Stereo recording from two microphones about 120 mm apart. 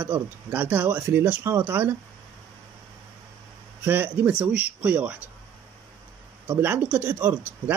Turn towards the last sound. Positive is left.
turn(degrees=-20)  # may be behind; listen again after turning